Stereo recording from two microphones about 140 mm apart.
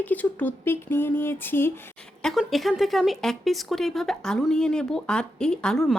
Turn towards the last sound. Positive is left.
turn(degrees=5)  # may be behind; listen again after turning